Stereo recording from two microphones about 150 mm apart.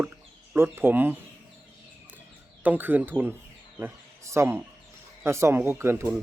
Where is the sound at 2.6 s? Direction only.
10° right (ahead or behind).